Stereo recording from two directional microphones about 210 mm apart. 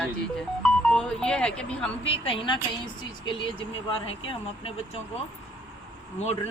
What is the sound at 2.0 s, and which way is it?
A woman's voice, 25° left (ahead or behind).